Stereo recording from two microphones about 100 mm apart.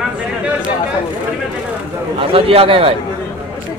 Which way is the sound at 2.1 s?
65° right (ahead or behind).